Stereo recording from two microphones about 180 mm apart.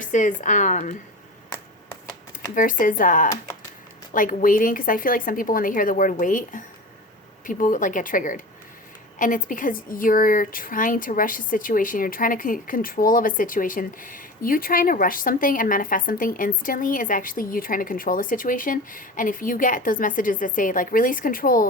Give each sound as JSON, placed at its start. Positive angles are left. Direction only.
{"t": 0.0, "sound": "a woman's voice", "side_deg": 45}
{"t": 2.6, "sound": "a woman's voice", "side_deg": 50}